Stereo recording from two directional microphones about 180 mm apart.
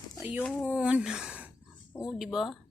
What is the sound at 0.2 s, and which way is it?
Speech, 10° right (ahead or behind).